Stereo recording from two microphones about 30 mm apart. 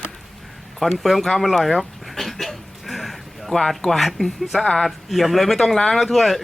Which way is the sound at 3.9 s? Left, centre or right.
Centre.